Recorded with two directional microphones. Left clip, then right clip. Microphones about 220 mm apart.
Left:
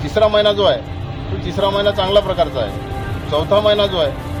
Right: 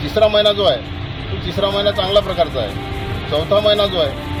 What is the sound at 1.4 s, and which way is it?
Speech, 25° left (ahead or behind).